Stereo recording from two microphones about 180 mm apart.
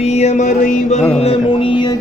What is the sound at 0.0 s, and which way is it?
Music, 35° left (ahead or behind).